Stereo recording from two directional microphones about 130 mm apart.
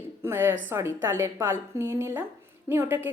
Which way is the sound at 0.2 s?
15° right (ahead or behind).